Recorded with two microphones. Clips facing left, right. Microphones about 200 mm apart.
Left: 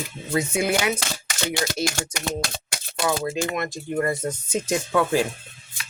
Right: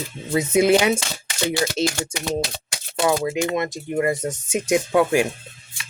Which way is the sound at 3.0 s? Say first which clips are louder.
Right 4 dB; 20° right (ahead or behind).